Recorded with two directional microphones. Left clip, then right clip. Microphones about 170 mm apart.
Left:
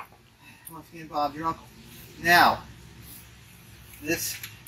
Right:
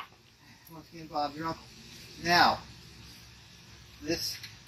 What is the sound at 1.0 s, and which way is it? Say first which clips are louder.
Speech: left 5 dB; 5° right (ahead or behind).